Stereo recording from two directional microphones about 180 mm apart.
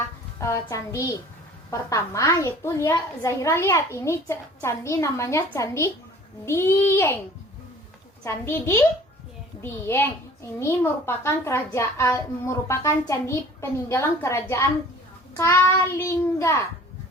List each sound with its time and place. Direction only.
0.3 s a child's voice: 15° left (ahead or behind)
8.2 s a child's voice: 15° left (ahead or behind)